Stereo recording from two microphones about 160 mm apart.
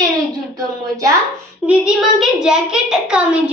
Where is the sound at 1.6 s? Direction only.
5° right (ahead or behind).